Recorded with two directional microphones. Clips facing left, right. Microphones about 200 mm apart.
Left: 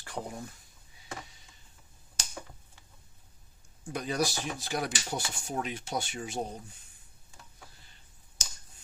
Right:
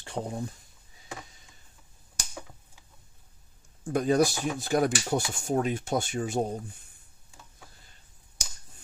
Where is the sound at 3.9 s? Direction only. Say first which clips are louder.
Right 8 dB; 45° right (ahead or behind).